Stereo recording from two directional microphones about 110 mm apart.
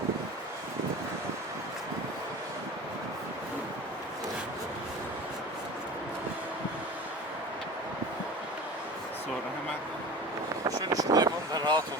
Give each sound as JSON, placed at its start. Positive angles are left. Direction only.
{"t": 10.8, "sound": "vehicle", "side_deg": -35}